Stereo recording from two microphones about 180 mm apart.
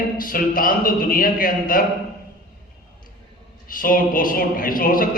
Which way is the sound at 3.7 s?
50° left (ahead or behind).